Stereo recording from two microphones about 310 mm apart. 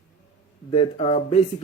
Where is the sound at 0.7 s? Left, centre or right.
Centre.